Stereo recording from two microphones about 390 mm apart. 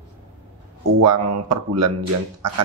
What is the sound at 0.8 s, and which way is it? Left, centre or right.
Speech, right.